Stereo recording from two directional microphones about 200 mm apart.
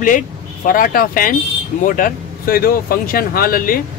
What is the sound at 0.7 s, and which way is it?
Speech, 45° left (ahead or behind).